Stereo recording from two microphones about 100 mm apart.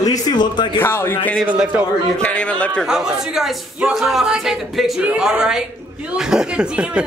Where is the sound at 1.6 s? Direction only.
10° right (ahead or behind).